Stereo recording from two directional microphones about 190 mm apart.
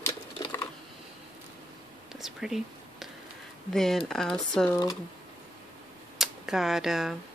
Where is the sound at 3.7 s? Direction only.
Centre (ahead or behind).